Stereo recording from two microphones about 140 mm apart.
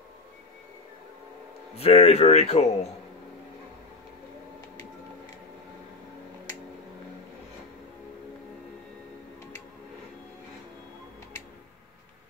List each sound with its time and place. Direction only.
1.8 s speech: 45° left (ahead or behind)